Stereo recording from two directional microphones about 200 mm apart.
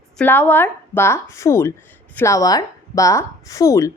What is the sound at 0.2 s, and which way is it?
A woman's voice, 10° left (ahead or behind).